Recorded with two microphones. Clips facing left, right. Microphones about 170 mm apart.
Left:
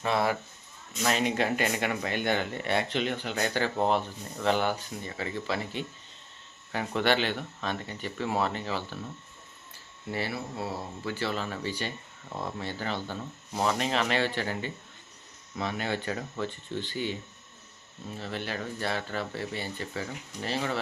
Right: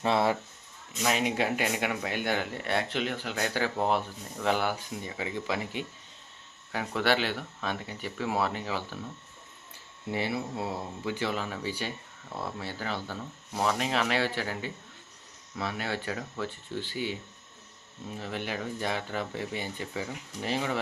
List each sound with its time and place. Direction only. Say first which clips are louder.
0.0 s speech: right 1 dB; 25° right (ahead or behind)
1.0 s speech: left 1 dB; 5° right (ahead or behind)
6.7 s speech: left 1 dB; 5° right (ahead or behind)
10.1 s speech: right 2 dB; 20° right (ahead or behind)